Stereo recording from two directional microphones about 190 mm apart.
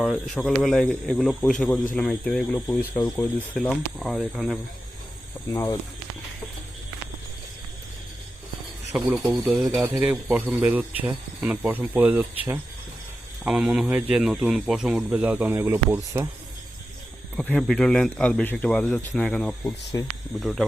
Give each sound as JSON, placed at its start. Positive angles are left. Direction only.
{"t": 0.0, "sound": "speech", "side_deg": 0}
{"t": 5.5, "sound": "speech", "side_deg": 15}
{"t": 8.9, "sound": "speech", "side_deg": 0}
{"t": 17.3, "sound": "speech", "side_deg": 5}
{"t": 19.6, "sound": "speech", "side_deg": 20}
{"t": 20.4, "sound": "speech", "side_deg": 0}